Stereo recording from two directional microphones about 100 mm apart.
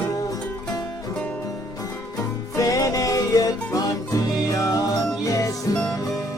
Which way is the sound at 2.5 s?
35° left (ahead or behind).